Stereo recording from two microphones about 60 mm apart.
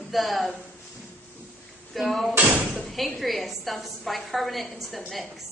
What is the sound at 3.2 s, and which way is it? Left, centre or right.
A woman's voice, centre.